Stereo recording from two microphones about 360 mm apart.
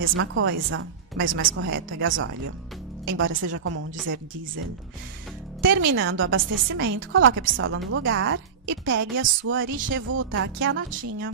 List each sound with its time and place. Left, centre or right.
0.0 s a woman's voice: right
5.6 s a woman's voice: right